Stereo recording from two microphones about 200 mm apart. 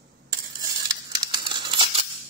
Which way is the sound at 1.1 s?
25° right (ahead or behind).